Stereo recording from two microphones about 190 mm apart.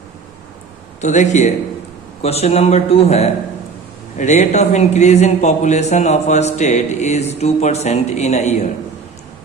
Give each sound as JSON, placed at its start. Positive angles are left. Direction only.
{"t": 1.0, "sound": "a man's voice", "side_deg": 40}